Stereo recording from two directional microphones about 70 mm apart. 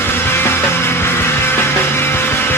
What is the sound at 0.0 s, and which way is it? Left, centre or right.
Music, left.